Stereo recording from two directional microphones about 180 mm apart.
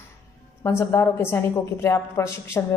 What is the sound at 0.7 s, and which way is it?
A woman's voice, 15° left (ahead or behind).